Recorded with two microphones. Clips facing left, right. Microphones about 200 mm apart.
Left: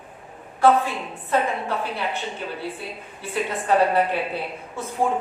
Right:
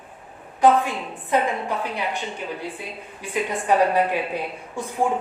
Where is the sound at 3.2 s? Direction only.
15° right (ahead or behind).